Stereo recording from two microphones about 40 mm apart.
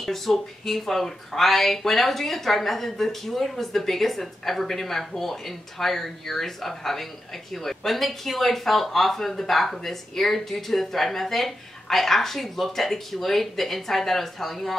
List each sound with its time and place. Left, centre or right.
0.0 s speech: centre